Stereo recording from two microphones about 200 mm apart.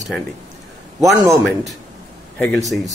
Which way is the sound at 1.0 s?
15° right (ahead or behind).